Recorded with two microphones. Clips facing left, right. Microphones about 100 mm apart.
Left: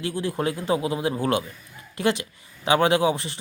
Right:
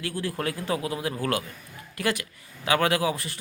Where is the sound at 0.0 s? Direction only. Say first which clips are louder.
Left 4 dB; 20° left (ahead or behind).